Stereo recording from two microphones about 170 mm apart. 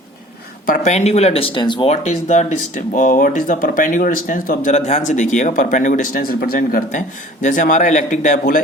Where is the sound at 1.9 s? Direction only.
40° left (ahead or behind).